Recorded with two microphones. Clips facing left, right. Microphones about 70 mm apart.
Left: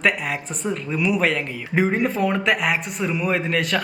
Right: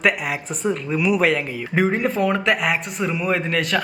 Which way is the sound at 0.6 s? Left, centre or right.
Centre.